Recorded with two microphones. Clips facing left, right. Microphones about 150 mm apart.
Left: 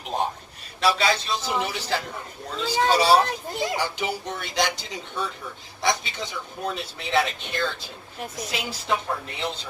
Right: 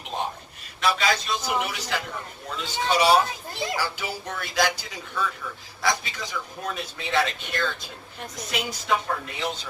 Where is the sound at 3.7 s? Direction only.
20° left (ahead or behind).